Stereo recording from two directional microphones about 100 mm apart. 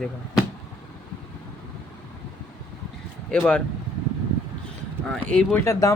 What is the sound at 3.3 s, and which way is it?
Speech, 10° left (ahead or behind).